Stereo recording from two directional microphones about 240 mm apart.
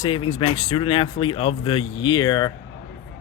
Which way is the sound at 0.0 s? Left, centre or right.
Left.